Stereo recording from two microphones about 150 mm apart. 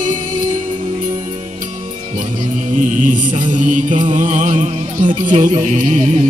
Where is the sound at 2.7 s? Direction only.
55° right (ahead or behind).